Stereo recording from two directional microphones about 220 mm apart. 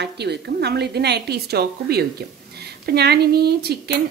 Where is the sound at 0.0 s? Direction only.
50° right (ahead or behind).